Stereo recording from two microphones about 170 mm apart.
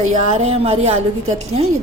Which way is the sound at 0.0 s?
45° right (ahead or behind).